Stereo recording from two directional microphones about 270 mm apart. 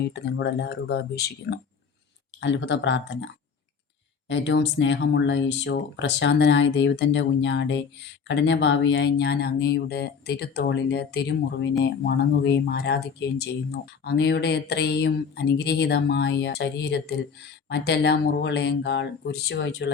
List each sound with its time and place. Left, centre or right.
0.0 s speech: left
4.3 s speech: left